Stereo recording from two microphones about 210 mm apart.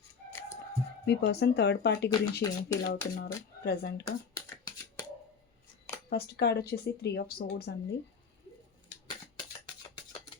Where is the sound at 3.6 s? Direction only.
50° left (ahead or behind).